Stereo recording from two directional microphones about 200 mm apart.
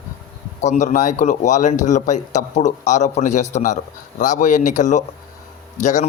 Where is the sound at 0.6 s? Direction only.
35° left (ahead or behind).